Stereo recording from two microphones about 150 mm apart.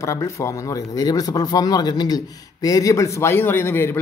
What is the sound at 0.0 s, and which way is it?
Speech, 20° left (ahead or behind).